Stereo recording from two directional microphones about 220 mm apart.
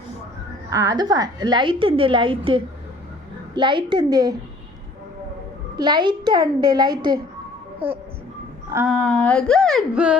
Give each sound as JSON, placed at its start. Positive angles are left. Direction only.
{"t": 0.7, "sound": "a woman's voice", "side_deg": -15}
{"t": 5.7, "sound": "a woman's voice", "side_deg": -20}
{"t": 8.7, "sound": "a sound", "side_deg": -10}
{"t": 9.0, "sound": "speech", "side_deg": 5}